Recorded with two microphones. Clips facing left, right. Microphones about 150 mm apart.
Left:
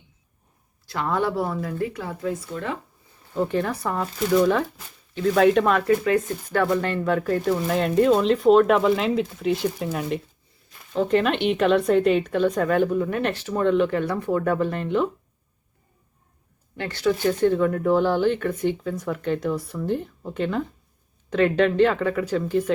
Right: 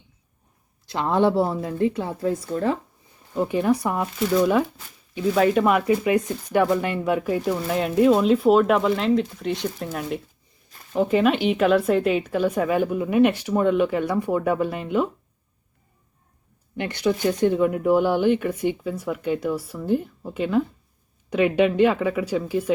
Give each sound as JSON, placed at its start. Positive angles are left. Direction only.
{"t": 0.9, "sound": "speech", "side_deg": -25}
{"t": 3.3, "sound": "a woman's voice", "side_deg": -10}
{"t": 16.7, "sound": "a woman's voice", "side_deg": -15}